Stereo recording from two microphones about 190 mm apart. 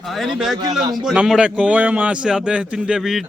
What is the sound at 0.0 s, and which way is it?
Speech, centre (ahead or behind).